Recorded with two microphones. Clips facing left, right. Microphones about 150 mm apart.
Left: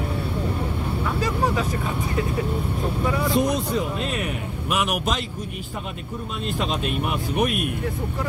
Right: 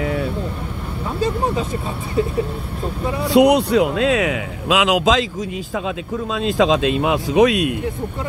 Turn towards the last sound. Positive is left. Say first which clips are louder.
# right 9 dB
turn(degrees=-90)